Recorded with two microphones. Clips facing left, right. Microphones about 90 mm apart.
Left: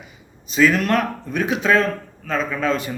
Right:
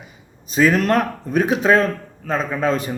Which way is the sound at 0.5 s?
35° right (ahead or behind).